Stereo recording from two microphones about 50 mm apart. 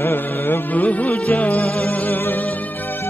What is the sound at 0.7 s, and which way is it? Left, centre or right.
Music, left.